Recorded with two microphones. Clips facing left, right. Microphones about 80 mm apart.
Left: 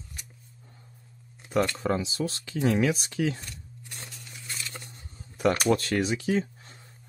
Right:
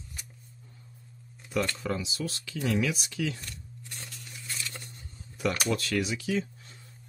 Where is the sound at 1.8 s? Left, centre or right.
Left.